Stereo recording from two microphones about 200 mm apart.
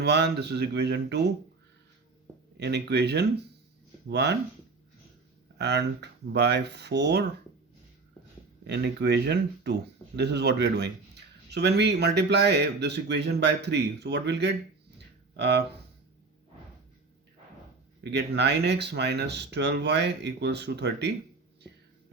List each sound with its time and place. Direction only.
0.0 s speech: 55° right (ahead or behind)
2.6 s speech: 55° right (ahead or behind)
5.5 s speech: 60° right (ahead or behind)
8.6 s speech: 60° right (ahead or behind)
14.9 s a sound: 55° right (ahead or behind)
18.0 s speech: 55° right (ahead or behind)